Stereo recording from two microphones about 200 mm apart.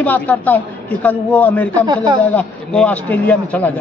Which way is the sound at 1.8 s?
20° right (ahead or behind).